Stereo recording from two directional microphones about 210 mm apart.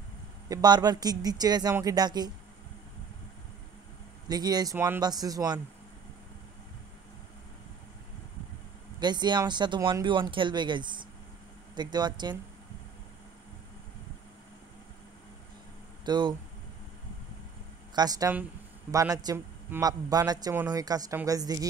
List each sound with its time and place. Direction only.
0.5 s speech: 20° right (ahead or behind)
4.3 s a man's voice: 20° right (ahead or behind)
9.0 s speech: 20° right (ahead or behind)
16.1 s speech: 20° right (ahead or behind)
17.9 s a man's voice: 20° right (ahead or behind)